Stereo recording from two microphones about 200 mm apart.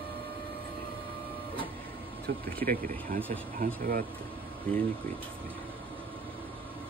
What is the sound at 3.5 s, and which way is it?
Speech, 45° right (ahead or behind).